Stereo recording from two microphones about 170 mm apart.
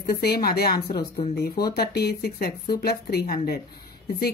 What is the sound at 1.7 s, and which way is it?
A woman's voice, 70° left (ahead or behind).